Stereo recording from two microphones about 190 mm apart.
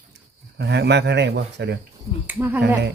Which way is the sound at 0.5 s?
60° right (ahead or behind).